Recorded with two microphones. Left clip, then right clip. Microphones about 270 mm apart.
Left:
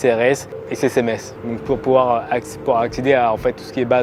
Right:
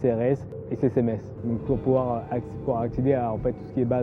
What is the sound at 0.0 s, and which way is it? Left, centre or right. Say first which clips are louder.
Speech: left 9 dB; centre.